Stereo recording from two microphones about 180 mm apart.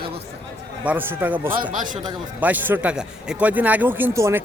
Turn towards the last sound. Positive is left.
turn(degrees=-15)  # may be behind; listen again after turning